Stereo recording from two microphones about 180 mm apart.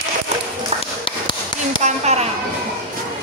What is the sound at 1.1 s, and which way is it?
Tap, 25° left (ahead or behind).